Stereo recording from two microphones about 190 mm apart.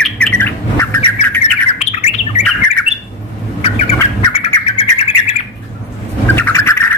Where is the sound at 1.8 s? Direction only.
35° left (ahead or behind).